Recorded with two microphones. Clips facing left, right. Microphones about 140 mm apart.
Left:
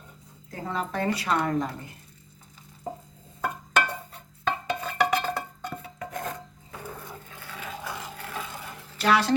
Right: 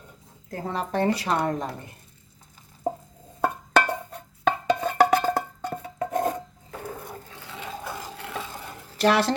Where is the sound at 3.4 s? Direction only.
40° right (ahead or behind).